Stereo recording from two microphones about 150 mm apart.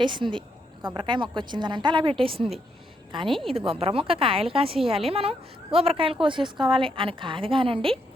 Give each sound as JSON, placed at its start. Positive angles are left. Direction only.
{"t": 0.0, "sound": "a woman's voice", "side_deg": -30}
{"t": 3.2, "sound": "a woman's voice", "side_deg": 0}
{"t": 3.5, "sound": "a woman's voice", "side_deg": -40}